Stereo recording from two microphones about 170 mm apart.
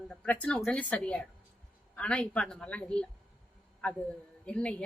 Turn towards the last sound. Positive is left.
turn(degrees=5)  # may be behind; listen again after turning